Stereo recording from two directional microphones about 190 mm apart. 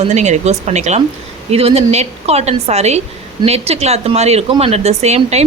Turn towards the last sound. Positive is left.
turn(degrees=-35)  # may be behind; listen again after turning